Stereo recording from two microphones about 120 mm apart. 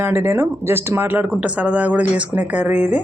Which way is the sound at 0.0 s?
20° right (ahead or behind).